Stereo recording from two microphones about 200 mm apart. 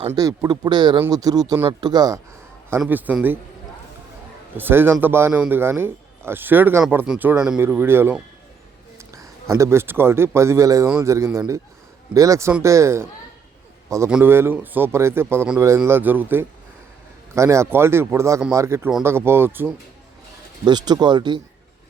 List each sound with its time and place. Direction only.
0.1 s speech: 20° right (ahead or behind)
2.8 s a man's voice: 5° right (ahead or behind)
4.5 s a man's voice: 10° right (ahead or behind)
14.1 s a man's voice: 10° right (ahead or behind)
20.7 s speech: 20° right (ahead or behind)